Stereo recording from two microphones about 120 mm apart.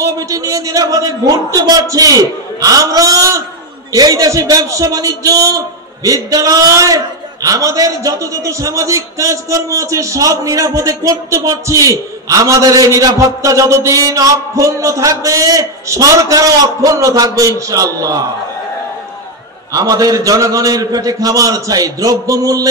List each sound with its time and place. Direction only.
0.0 s a man's voice: 30° right (ahead or behind)
19.7 s a man's voice: 30° right (ahead or behind)